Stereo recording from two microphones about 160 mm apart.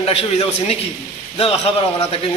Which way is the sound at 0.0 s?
40° left (ahead or behind).